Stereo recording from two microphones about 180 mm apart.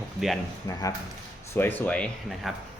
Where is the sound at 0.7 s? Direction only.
20° left (ahead or behind); by 2.5 s 5° left (ahead or behind).